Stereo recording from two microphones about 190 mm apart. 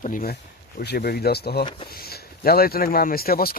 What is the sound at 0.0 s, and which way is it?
Speech, 45° left (ahead or behind).